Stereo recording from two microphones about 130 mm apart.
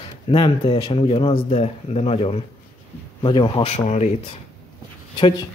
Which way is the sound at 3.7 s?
60° left (ahead or behind).